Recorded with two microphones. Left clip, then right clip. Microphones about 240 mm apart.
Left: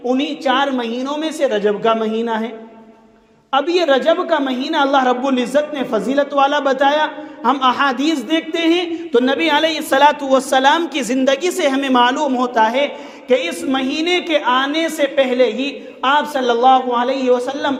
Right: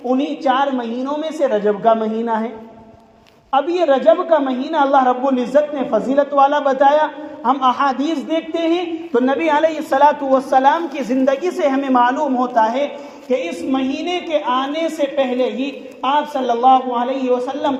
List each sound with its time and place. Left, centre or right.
0.0 s a woman's voice: left
3.5 s a woman's voice: left